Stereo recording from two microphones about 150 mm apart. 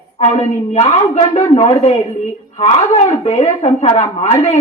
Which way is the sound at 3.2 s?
50° left (ahead or behind).